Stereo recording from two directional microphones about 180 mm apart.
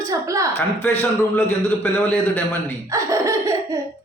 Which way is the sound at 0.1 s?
20° right (ahead or behind).